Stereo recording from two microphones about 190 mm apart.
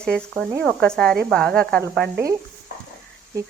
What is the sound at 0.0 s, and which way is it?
Speech, 5° left (ahead or behind).